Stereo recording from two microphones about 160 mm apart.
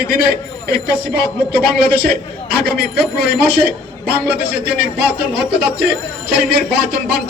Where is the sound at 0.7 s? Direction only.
80° right.